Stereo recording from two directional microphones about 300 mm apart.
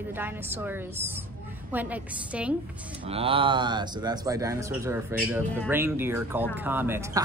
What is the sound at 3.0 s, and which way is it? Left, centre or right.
A woman's voice, centre.